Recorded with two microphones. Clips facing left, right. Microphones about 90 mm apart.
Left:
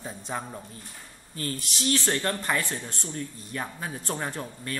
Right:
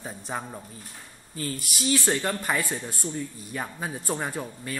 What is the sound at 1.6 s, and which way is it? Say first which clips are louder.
Speech: right 2 dB; 10° right (ahead or behind).